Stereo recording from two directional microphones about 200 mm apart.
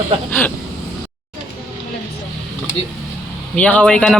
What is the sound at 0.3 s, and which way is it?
Speech, 10° left (ahead or behind).